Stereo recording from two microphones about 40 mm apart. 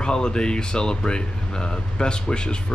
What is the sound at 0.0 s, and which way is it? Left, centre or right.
Speech, left.